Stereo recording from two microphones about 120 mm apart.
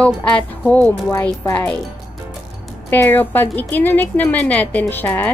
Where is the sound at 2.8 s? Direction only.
15° left (ahead or behind).